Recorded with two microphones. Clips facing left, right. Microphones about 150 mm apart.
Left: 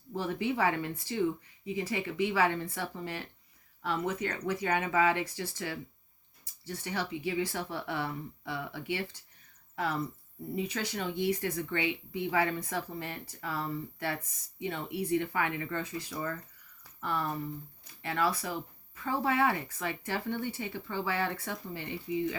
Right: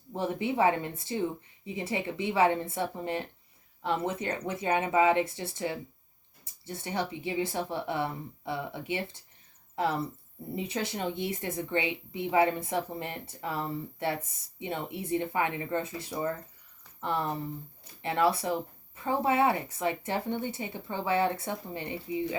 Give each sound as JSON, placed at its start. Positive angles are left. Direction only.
{"t": 0.1, "sound": "speech", "side_deg": -20}